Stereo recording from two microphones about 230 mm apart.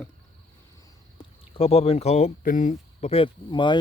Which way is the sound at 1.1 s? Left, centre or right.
Left.